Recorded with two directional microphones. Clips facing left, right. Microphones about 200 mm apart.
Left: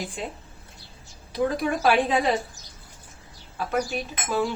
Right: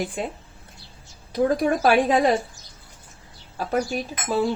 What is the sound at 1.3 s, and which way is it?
A woman's voice, 45° right (ahead or behind).